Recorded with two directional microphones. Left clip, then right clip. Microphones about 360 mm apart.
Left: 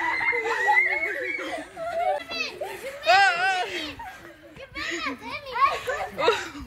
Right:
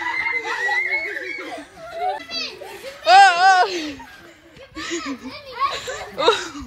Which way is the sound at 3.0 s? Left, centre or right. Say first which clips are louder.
Right 8 dB; centre.